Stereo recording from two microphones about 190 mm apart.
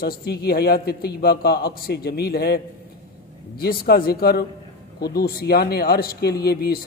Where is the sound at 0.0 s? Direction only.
55° left (ahead or behind).